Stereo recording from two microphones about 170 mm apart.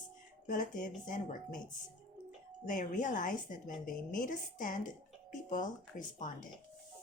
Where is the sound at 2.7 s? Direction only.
50° left (ahead or behind).